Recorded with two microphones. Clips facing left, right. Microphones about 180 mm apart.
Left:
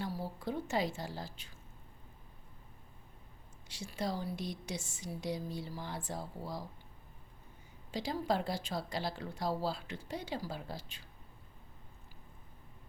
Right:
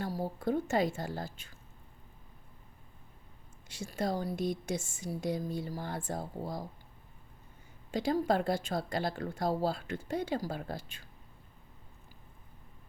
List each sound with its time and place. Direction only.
0.0 s a woman's voice: 45° right (ahead or behind)
3.7 s speech: 50° right (ahead or behind)
7.9 s speech: 50° right (ahead or behind)